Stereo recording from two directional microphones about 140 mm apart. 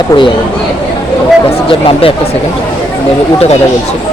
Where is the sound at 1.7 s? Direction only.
40° left (ahead or behind).